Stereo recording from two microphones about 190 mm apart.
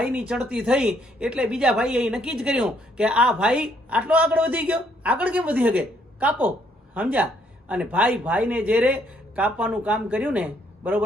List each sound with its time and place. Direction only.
0.0 s speech: 5° right (ahead or behind)